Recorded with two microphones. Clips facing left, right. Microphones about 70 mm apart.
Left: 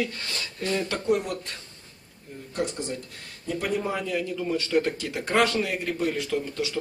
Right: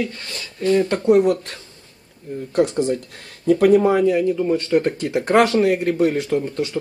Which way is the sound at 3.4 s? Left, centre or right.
Right.